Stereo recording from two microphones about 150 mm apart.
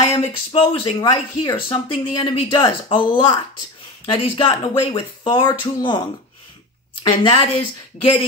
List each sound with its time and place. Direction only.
0.1 s speech: 40° left (ahead or behind)